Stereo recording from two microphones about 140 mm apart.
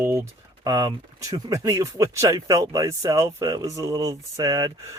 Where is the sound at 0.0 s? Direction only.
15° right (ahead or behind).